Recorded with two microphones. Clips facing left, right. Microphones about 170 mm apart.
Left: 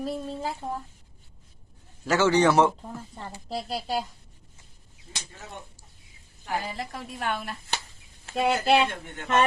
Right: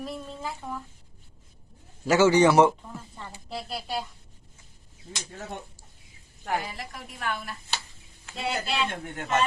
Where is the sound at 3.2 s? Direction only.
40° left (ahead or behind).